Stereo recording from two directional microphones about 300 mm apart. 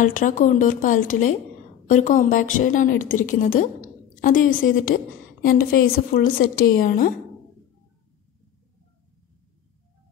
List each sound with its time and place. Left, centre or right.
0.0 s a woman's voice: left